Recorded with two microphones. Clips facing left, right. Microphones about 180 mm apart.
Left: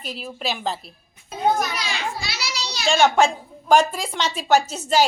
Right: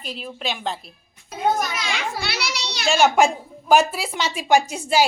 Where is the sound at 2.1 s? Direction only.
65° right (ahead or behind).